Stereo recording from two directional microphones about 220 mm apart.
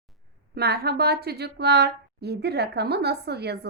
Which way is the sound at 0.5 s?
45° right (ahead or behind).